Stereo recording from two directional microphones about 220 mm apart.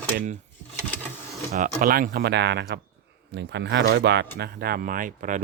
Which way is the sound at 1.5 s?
40° right (ahead or behind).